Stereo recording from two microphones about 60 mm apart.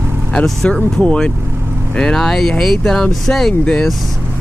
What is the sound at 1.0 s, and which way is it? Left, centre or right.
Speech, centre.